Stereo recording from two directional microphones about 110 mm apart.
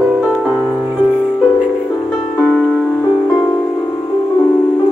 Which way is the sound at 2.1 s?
10° left (ahead or behind).